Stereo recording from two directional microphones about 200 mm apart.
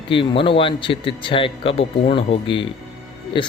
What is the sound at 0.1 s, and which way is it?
Speech, 25° left (ahead or behind).